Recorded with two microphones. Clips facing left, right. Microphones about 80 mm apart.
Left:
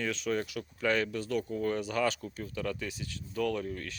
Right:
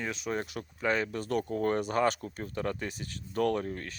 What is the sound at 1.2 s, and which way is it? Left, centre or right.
Speech, right.